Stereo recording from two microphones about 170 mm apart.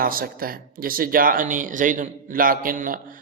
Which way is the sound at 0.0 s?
60° right (ahead or behind).